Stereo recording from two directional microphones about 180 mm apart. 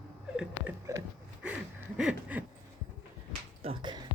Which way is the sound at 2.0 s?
5° right (ahead or behind).